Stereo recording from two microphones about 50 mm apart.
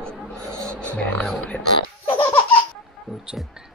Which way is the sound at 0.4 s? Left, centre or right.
Right.